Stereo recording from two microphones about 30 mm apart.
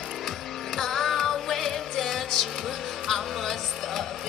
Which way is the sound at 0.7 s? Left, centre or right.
Centre.